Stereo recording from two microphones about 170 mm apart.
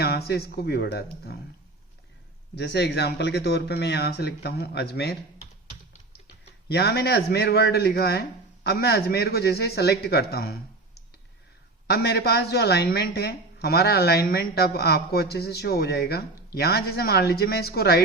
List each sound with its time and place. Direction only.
0.0 s speech: 70° left (ahead or behind)
2.6 s speech: 80° left
6.7 s speech: 75° left (ahead or behind)
11.9 s speech: 70° left (ahead or behind)